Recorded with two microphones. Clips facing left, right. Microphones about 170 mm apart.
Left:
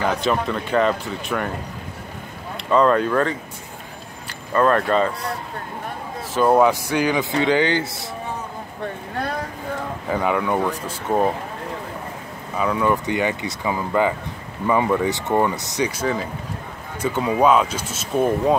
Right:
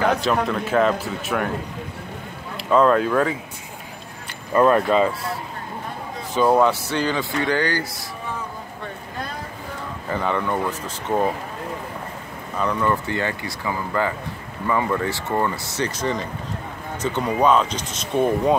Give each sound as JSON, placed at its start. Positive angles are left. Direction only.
{"t": 0.1, "sound": "speech", "side_deg": 0}
{"t": 2.5, "sound": "speech", "side_deg": 0}
{"t": 4.6, "sound": "speech", "side_deg": -10}
{"t": 6.3, "sound": "speech", "side_deg": 5}
{"t": 10.0, "sound": "speech", "side_deg": 10}
{"t": 12.5, "sound": "speech", "side_deg": 10}